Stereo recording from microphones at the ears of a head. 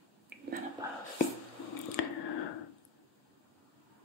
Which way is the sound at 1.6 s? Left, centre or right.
Left.